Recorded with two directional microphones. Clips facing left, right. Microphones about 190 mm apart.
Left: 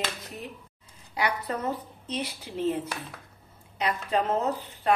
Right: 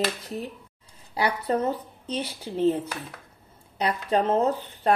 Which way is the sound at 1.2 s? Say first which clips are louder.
Right 5 dB; 30° right (ahead or behind).